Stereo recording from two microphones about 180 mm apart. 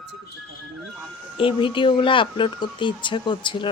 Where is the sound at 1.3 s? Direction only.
30° left (ahead or behind).